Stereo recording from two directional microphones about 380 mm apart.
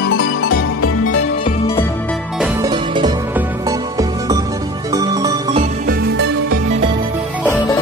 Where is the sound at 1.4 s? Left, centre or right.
Centre.